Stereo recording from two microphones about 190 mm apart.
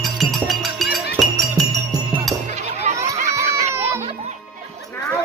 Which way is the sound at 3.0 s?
15° right (ahead or behind).